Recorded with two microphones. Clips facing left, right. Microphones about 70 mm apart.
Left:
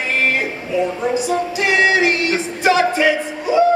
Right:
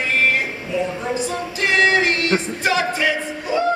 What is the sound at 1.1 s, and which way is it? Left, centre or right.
Music, centre.